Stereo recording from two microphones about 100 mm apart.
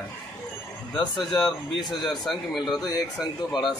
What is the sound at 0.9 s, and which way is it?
Speech, 50° left (ahead or behind).